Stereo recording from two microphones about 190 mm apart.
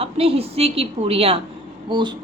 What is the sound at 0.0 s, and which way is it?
A woman's voice, 30° right (ahead or behind).